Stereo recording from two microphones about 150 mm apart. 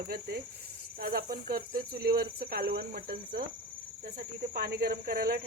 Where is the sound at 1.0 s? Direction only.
75° right (ahead or behind).